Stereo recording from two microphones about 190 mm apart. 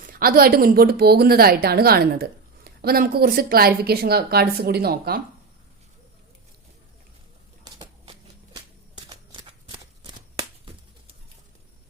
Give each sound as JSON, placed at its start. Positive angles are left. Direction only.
{"t": 0.0, "sound": "a woman's voice", "side_deg": -50}
{"t": 7.6, "sound": "a sound", "side_deg": -25}
{"t": 8.5, "sound": "shuffling cards", "side_deg": -20}